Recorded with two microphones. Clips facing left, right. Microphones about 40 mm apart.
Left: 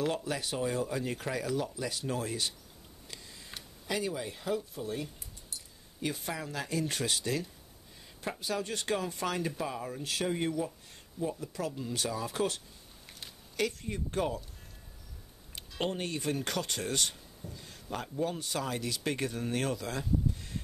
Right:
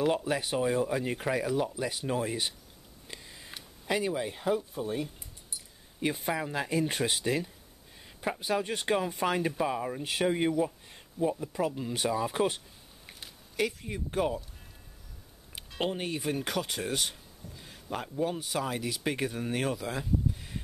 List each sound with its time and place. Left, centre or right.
0.0 s speech: centre
3.1 s a sound: centre
3.8 s speech: right
15.5 s speech: centre